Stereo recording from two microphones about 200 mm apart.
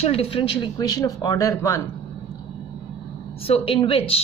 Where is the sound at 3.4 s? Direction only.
30° left (ahead or behind).